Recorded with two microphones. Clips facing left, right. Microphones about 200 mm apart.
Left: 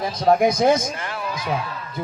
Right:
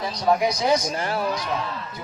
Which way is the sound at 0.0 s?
50° left (ahead or behind).